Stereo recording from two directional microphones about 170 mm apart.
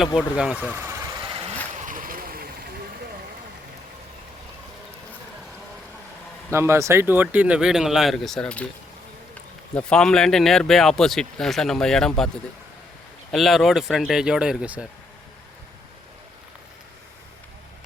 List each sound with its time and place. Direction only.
0.2 s vehicle: 5° right (ahead or behind)
1.3 s vehicle: 30° right (ahead or behind)
1.7 s a sound: 50° right (ahead or behind)
6.5 s speech: 15° right (ahead or behind); by 8.6 s 5° left (ahead or behind)
9.7 s speech: 5° left (ahead or behind)
13.3 s speech: centre (ahead or behind)